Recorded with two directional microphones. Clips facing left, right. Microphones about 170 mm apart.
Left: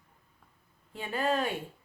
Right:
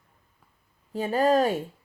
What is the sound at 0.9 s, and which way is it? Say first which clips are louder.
Speech: right 8 dB; 40° right (ahead or behind).